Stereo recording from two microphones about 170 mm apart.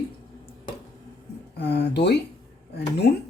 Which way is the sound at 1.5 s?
80° left.